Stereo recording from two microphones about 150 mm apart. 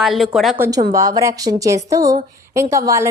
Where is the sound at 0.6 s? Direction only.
25° right (ahead or behind).